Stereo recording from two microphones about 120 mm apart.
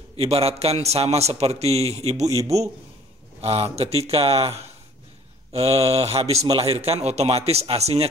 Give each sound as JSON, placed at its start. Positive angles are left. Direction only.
{"t": 0.2, "sound": "a man's voice", "side_deg": -55}
{"t": 3.3, "sound": "a man's voice", "side_deg": -55}